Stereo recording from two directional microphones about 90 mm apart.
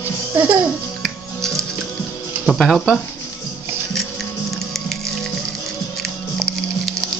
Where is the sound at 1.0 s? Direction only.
5° left (ahead or behind).